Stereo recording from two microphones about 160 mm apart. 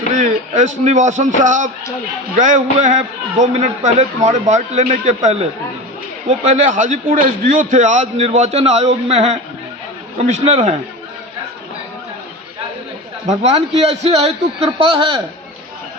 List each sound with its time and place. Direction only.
0.2 s a man's voice: 50° right (ahead or behind)
13.3 s a man's voice: 45° right (ahead or behind)